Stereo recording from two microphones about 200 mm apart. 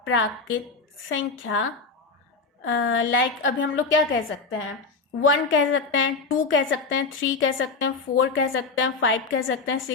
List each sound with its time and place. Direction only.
0.0 s a woman's voice: 70° left (ahead or behind)
2.6 s a woman's voice: 70° left (ahead or behind)